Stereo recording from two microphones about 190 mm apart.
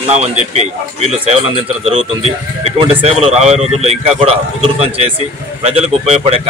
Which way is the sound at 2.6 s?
35° right (ahead or behind).